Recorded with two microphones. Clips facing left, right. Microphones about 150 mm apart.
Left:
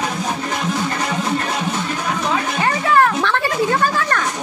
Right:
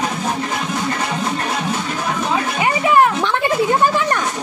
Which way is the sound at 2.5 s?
15° right (ahead or behind).